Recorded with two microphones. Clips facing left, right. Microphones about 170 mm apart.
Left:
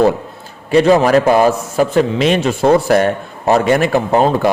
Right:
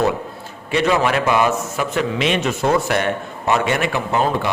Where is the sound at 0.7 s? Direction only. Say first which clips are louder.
Left 8 dB; 35° left (ahead or behind).